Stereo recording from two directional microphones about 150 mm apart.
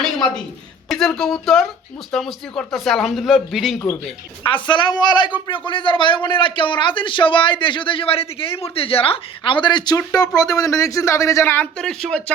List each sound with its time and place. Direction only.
0.9 s speech: centre (ahead or behind)
4.4 s a man's voice: 35° left (ahead or behind); by 12.2 s 5° left (ahead or behind)